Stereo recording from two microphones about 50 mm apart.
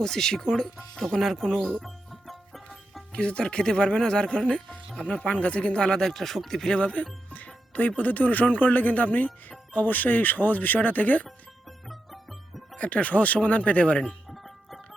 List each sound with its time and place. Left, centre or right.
0.0 s speech: centre
1.1 s speech: centre
1.8 s music: centre
3.1 s speech: left; by 6.7 s centre
6.7 s speech: left
11.9 s music: centre
12.7 s speech: left